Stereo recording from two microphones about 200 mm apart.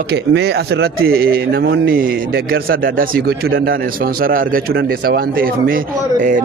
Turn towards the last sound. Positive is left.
turn(degrees=-45)  # may be behind; listen again after turning